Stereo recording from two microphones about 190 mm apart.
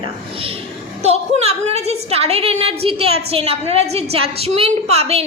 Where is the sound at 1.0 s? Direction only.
35° right (ahead or behind).